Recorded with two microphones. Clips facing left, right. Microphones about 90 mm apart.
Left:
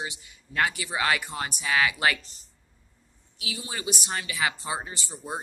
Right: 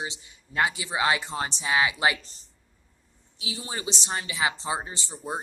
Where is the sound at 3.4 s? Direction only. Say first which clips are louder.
Even; 30° right (ahead or behind).